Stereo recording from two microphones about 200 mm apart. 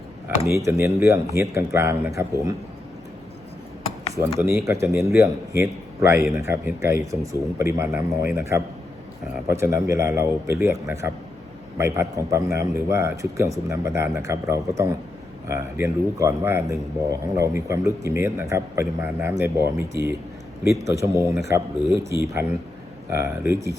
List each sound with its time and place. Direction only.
0.3 s a man's voice: 15° right (ahead or behind)
4.1 s a man's voice: 15° right (ahead or behind)
22.4 s a man's voice: 10° right (ahead or behind)